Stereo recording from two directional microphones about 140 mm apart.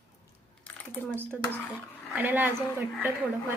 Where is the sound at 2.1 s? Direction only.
10° right (ahead or behind).